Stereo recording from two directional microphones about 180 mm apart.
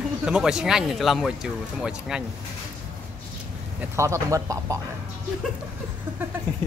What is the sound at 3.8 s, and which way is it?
Speech, 15° right (ahead or behind).